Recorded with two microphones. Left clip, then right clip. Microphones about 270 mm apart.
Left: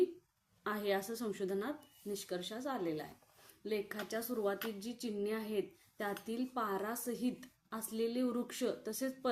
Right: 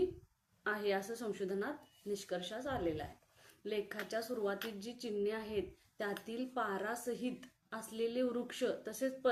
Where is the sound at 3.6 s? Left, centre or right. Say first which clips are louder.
Left 1 dB; left.